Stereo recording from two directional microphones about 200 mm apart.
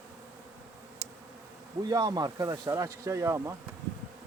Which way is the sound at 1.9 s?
20° right (ahead or behind).